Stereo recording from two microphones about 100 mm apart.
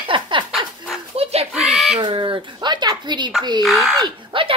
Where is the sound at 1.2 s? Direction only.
90° right.